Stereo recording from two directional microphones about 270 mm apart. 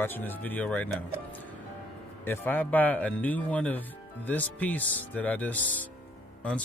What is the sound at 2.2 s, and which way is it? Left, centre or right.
Speech, centre.